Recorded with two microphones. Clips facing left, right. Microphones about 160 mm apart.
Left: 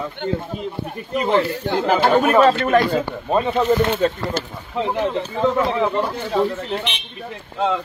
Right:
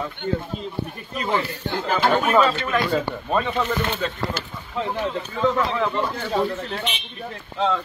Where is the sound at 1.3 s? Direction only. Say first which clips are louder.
Left 5 dB; 75° left (ahead or behind).